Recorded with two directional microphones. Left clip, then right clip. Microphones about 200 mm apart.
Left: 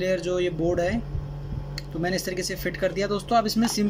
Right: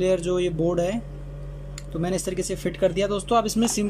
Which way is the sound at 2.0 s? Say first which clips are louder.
Even; 10° right (ahead or behind).